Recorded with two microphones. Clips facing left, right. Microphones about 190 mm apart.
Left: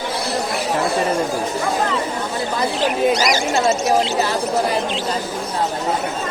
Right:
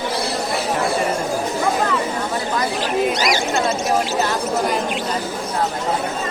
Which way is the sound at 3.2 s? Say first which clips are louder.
Left 1 dB; 40° left (ahead or behind).